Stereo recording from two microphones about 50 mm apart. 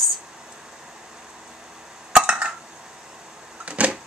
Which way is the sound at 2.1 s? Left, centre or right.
Centre.